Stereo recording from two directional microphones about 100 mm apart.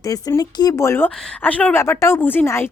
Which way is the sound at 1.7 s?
25° left (ahead or behind).